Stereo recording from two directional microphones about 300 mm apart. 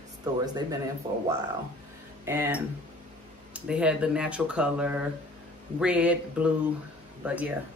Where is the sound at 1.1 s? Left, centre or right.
Centre.